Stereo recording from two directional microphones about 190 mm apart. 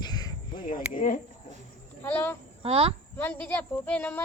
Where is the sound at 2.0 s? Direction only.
10° left (ahead or behind).